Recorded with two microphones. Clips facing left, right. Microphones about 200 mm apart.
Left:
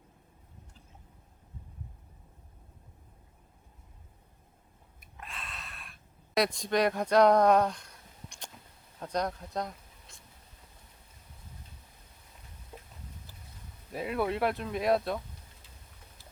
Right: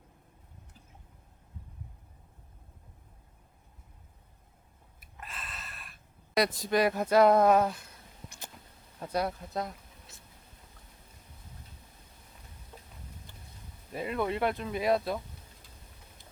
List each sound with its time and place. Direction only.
4.9 s a sound: centre (ahead or behind)
9.0 s speech: 5° right (ahead or behind)
13.3 s boat: 5° left (ahead or behind)
13.9 s speech: centre (ahead or behind)